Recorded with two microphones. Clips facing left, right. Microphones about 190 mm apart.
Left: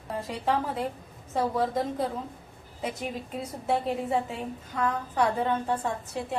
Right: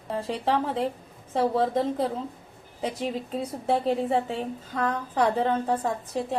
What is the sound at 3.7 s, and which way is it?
A woman's voice, 30° right (ahead or behind).